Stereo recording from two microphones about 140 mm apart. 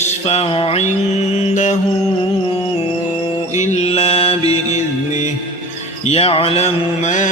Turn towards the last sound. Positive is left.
turn(degrees=60)  # may be behind; listen again after turning